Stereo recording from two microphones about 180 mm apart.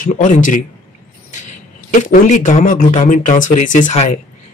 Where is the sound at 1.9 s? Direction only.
45° left (ahead or behind).